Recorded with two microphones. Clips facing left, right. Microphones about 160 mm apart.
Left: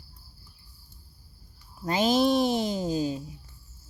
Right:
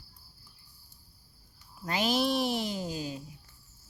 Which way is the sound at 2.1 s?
45° left (ahead or behind).